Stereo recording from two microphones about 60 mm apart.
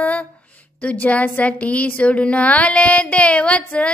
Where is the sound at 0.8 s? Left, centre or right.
Left.